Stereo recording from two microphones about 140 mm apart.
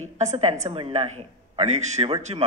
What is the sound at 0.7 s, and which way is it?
A woman's voice, 45° right (ahead or behind).